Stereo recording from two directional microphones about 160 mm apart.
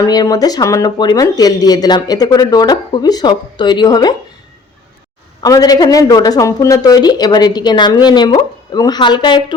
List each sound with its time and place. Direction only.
0.0 s speech: 25° left (ahead or behind)
5.4 s speech: 25° left (ahead or behind)